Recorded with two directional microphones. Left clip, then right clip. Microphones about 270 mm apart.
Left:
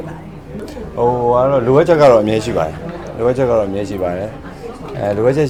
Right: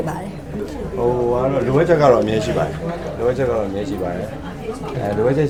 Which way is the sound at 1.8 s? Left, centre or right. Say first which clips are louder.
Left 2 dB; left.